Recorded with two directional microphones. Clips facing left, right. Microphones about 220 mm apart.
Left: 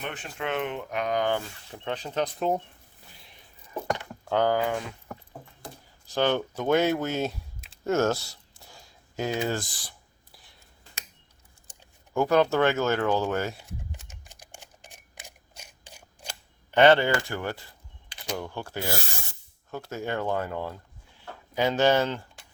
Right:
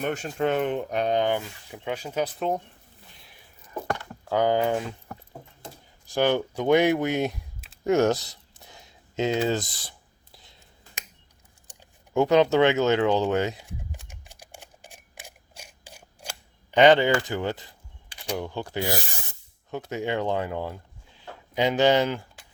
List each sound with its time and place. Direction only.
0.0 s speech: 40° right (ahead or behind); by 1.4 s 25° right (ahead or behind)
1.7 s speech: 10° right (ahead or behind)
4.3 s speech: 10° right (ahead or behind)
4.5 s speech: 25° right (ahead or behind)
6.1 s speech: 10° right (ahead or behind)
7.9 s a sound: 15° right (ahead or behind)
11.7 s speech: 20° right (ahead or behind)
14.0 s typewriter: 10° right (ahead or behind)
15.6 s scissors: 10° right (ahead or behind)
16.7 s speech: 15° right (ahead or behind)